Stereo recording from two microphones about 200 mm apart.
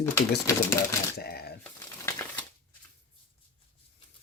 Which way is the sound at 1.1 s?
50° left (ahead or behind).